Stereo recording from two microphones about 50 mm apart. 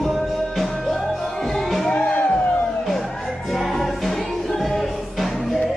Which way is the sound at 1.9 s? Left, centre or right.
Left.